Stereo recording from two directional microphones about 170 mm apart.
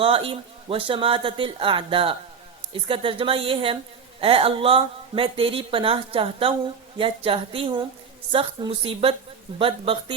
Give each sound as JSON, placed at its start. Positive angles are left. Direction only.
{"t": 0.0, "sound": "a woman's voice", "side_deg": -35}